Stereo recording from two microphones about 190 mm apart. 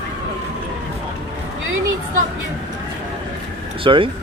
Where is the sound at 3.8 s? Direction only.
25° right (ahead or behind).